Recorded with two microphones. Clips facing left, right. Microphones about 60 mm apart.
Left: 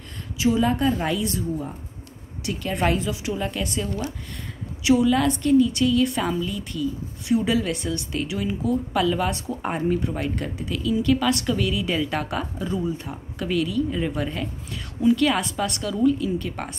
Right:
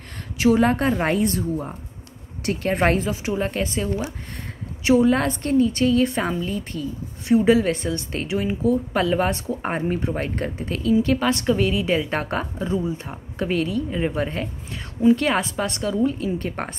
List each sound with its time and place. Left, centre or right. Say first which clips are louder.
0.4 s a woman's voice: right 3 dB; right
12.6 s a woman's voice: right 2 dB; right